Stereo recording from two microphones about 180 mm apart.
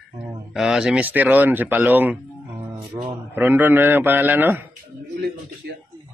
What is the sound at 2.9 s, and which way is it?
Speech, 20° right (ahead or behind).